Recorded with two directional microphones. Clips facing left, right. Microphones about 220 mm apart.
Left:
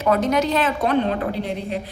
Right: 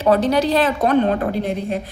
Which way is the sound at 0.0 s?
30° right (ahead or behind).